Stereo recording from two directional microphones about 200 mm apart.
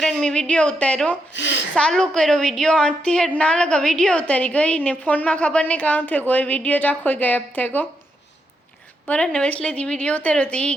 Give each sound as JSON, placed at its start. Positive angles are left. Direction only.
{"t": 0.0, "sound": "a woman's voice", "side_deg": 0}
{"t": 1.3, "sound": "a sound", "side_deg": 65}
{"t": 1.7, "sound": "a woman's voice", "side_deg": 5}
{"t": 9.0, "sound": "a woman's voice", "side_deg": 5}